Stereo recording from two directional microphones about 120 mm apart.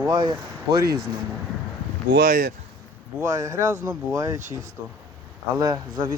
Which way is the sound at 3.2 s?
25° right (ahead or behind).